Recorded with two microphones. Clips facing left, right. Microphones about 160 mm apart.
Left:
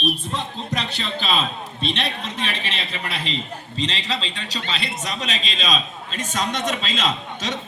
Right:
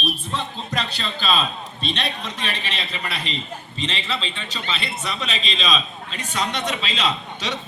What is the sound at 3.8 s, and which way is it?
A man's voice, 35° left (ahead or behind).